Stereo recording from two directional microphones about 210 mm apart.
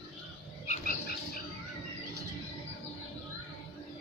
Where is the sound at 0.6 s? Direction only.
40° left (ahead or behind).